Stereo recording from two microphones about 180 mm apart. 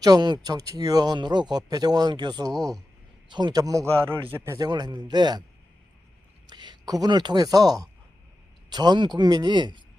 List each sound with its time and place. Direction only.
0.0 s speech: 25° right (ahead or behind)
6.5 s speech: 25° right (ahead or behind)